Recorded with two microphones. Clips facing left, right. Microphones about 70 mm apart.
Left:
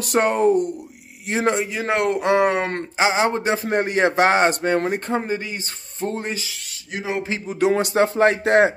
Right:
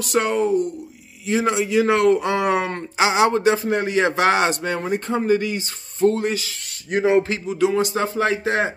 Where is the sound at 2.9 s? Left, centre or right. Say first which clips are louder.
Right 2 dB; left.